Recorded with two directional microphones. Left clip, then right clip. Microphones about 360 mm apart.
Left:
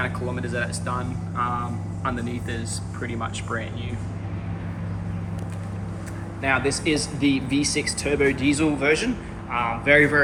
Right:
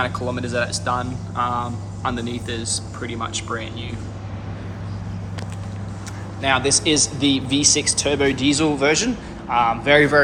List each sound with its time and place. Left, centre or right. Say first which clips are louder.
0.0 s speech: right 4 dB; centre
6.4 s speech: right 4 dB; centre
7.2 s speech: right 3 dB; right
7.4 s speech: right 5 dB; centre